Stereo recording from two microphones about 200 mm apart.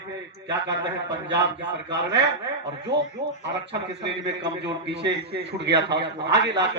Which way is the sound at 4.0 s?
60° right (ahead or behind).